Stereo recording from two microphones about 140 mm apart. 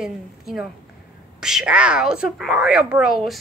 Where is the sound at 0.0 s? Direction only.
Centre (ahead or behind).